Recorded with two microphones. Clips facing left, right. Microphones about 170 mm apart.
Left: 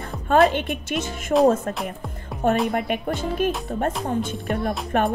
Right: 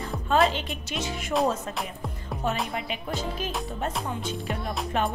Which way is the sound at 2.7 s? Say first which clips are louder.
Left 8 dB; 55° left (ahead or behind).